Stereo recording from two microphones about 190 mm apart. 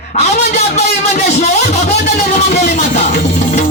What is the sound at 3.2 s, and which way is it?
Music, 55° left (ahead or behind).